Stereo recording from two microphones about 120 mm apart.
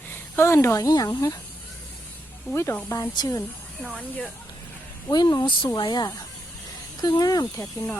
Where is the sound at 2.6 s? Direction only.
20° left (ahead or behind).